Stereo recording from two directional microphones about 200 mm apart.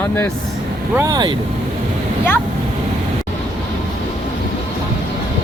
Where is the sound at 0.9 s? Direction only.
15° right (ahead or behind).